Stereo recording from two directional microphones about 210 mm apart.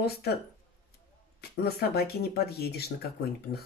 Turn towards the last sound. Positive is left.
turn(degrees=50)  # may be behind; listen again after turning